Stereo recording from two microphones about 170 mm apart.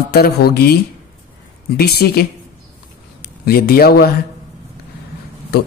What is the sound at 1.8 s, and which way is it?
Speech, 65° left (ahead or behind).